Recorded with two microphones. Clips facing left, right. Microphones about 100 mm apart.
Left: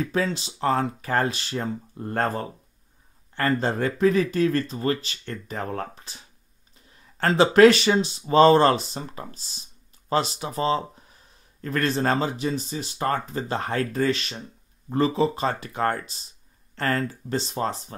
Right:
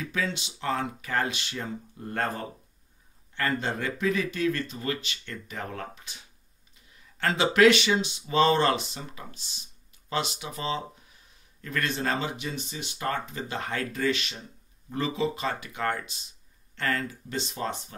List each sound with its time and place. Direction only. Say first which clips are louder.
0.0 s speech: left 6 dB; 35° left (ahead or behind)